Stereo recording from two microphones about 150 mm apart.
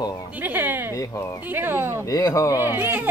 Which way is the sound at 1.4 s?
15° right (ahead or behind).